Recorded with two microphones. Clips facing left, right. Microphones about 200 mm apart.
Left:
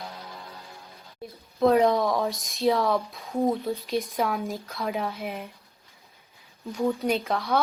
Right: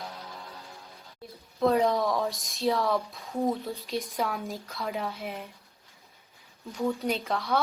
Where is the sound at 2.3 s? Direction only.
15° left (ahead or behind).